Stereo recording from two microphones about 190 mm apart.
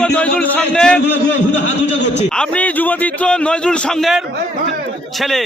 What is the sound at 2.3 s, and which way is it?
A man's voice, 5° left (ahead or behind).